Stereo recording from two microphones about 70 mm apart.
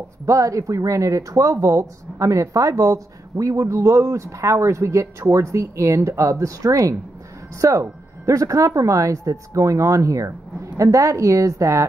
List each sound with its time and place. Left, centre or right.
0.3 s speech: right